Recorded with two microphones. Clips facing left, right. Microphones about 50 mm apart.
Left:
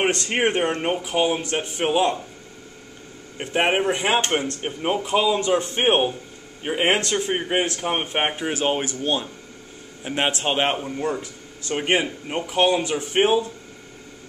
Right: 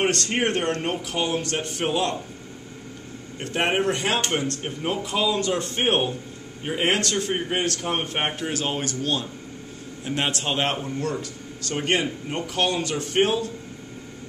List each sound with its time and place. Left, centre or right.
0.0 s speech: centre
3.3 s a man's voice: centre